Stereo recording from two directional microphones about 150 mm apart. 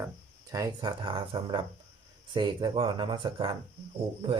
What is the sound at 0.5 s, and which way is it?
Speech, 25° right (ahead or behind).